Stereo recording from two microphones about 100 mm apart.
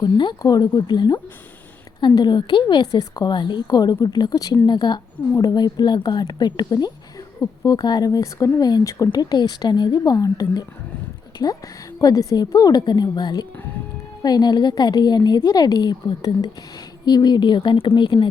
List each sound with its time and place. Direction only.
0.0 s a woman's voice: 50° left (ahead or behind)
11.4 s a woman's voice: 30° left (ahead or behind); by 18.3 s 55° left (ahead or behind)